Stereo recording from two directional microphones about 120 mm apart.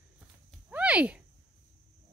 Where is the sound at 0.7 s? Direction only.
10° right (ahead or behind).